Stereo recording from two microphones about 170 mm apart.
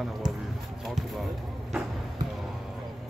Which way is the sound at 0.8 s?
Centre (ahead or behind).